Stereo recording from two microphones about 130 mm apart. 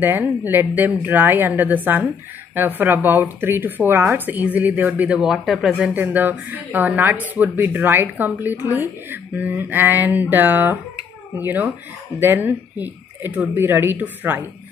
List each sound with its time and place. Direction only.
0.0 s a woman's voice: 15° right (ahead or behind)
5.9 s a woman's voice: 15° right (ahead or behind)